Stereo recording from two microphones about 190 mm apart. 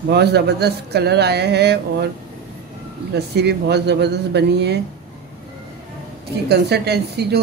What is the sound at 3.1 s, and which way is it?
A woman's voice, 60° right (ahead or behind).